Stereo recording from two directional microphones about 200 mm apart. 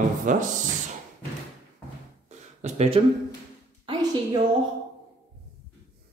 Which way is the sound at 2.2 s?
35° right (ahead or behind).